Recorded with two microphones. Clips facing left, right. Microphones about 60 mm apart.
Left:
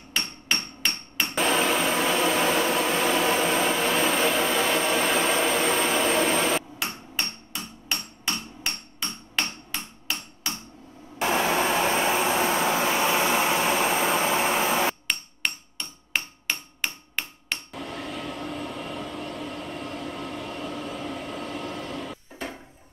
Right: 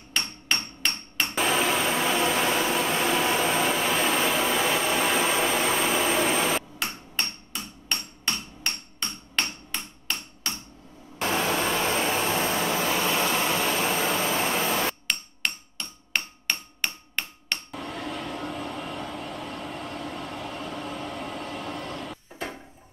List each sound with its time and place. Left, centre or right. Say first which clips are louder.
0.1 s hammer: even; centre
11.1 s a sound: left 2 dB; centre
15.0 s hammer: even; centre